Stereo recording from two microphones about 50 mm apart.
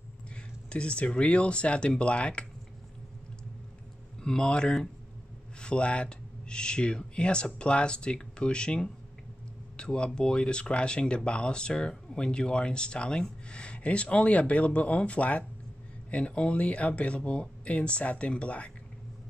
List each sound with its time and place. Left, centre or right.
0.7 s speech: left
4.2 s speech: centre